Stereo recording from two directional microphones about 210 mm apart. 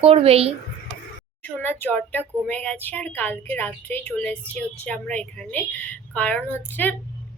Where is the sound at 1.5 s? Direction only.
10° left (ahead or behind).